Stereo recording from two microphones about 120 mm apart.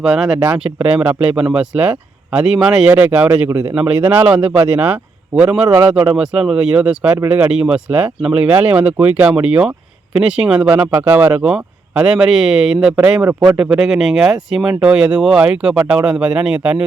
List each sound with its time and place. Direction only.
0.0 s speech: 5° right (ahead or behind)
3.5 s speech: 30° right (ahead or behind)
3.8 s speech: 10° right (ahead or behind)
5.6 s speech: 30° right (ahead or behind)
5.9 s speech: 10° right (ahead or behind)